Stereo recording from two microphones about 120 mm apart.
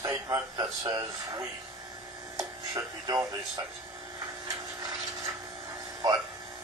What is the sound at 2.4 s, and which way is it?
Music, 30° right (ahead or behind).